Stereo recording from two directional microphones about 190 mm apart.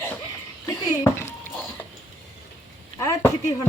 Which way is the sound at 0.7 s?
15° left (ahead or behind).